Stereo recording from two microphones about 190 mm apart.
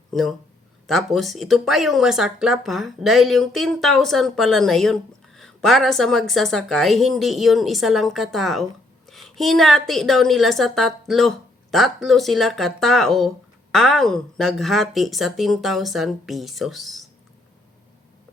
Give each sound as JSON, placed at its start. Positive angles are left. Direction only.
{"t": 0.1, "sound": "speech", "side_deg": 0}